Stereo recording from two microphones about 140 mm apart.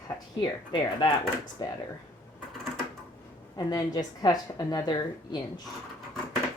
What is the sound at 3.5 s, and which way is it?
A woman's voice, 30° left (ahead or behind).